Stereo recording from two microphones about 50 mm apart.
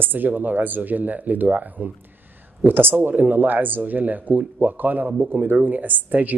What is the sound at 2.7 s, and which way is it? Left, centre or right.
Speech, right.